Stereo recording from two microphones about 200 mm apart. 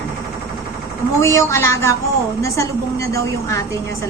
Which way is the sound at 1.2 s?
15° left (ahead or behind).